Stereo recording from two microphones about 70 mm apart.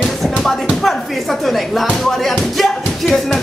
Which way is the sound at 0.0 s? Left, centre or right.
Centre.